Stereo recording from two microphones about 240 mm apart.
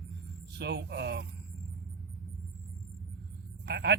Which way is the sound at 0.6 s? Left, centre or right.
Right.